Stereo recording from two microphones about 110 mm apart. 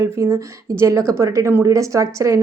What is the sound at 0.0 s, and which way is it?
A woman's voice, 25° right (ahead or behind).